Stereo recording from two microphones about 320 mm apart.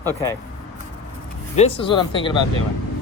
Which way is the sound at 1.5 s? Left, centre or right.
Centre.